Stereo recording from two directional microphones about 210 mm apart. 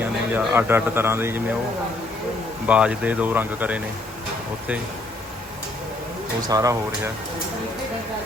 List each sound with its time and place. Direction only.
0.0 s a man's voice: 10° right (ahead or behind)
2.6 s speech: 5° right (ahead or behind)
6.5 s speech: 15° right (ahead or behind)